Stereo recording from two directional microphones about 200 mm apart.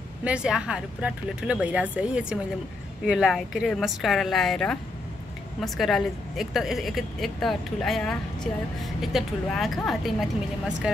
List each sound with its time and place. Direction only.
0.2 s a woman's voice: 5° right (ahead or behind)